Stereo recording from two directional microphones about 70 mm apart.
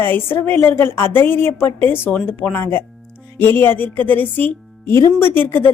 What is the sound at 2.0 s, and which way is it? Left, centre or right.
A woman's voice, left.